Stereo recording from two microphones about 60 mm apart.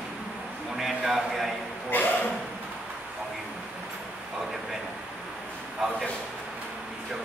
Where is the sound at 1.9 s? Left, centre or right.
Left.